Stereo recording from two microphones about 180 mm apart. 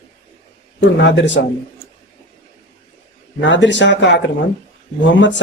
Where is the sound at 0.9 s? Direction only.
80° left.